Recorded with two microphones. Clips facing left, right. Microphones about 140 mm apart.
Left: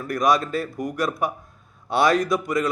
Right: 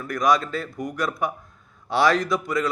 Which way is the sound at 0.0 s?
25° left (ahead or behind).